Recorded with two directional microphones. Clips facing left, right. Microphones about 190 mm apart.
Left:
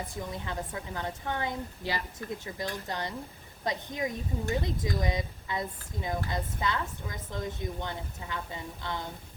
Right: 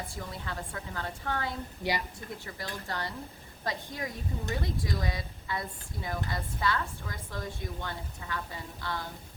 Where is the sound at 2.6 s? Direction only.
20° left (ahead or behind).